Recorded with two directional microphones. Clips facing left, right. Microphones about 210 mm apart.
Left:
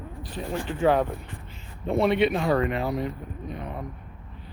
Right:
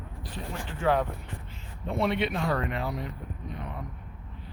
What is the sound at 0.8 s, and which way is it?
Speech, 20° left (ahead or behind).